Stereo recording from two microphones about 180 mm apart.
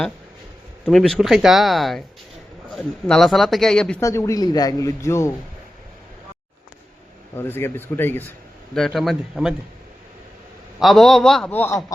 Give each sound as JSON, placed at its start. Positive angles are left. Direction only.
{"t": 0.9, "sound": "a man's voice", "side_deg": 0}
{"t": 4.0, "sound": "speech", "side_deg": 15}
{"t": 7.3, "sound": "a man's voice", "side_deg": 10}
{"t": 10.8, "sound": "a man's voice", "side_deg": 0}